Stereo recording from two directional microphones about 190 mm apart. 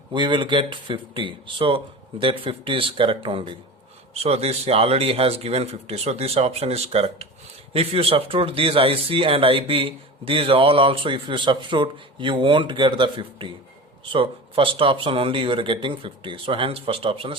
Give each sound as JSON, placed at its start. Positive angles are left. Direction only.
{"t": 0.1, "sound": "a man's voice", "side_deg": -25}